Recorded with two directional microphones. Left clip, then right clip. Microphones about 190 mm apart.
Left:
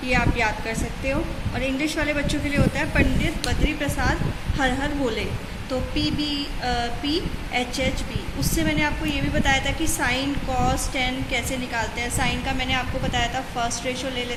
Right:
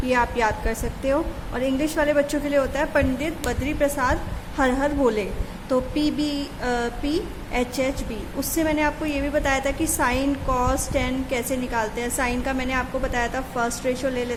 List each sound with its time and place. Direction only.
0.1 s a woman's voice: 60° right (ahead or behind)